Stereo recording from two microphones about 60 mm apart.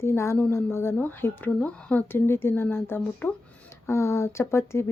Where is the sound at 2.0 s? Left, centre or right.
Left.